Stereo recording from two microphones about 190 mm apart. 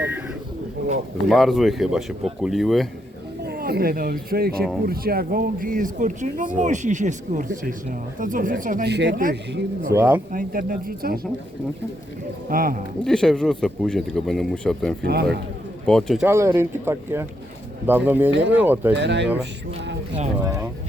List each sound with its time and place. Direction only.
1.3 s speech: centre (ahead or behind)
3.4 s speech: 55° right (ahead or behind)
8.8 s speech: 65° right (ahead or behind)
9.9 s speech: 10° right (ahead or behind)
10.3 s speech: 45° right (ahead or behind)
12.5 s speech: 50° right (ahead or behind)
13.1 s speech: 5° left (ahead or behind)
15.0 s speech: 60° right (ahead or behind)
15.9 s speech: centre (ahead or behind)
16.2 s speech: 10° right (ahead or behind)
18.9 s speech: 65° right (ahead or behind)
20.4 s speech: 15° right (ahead or behind)